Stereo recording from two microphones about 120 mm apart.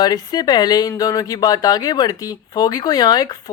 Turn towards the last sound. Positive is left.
turn(degrees=35)  # may be behind; listen again after turning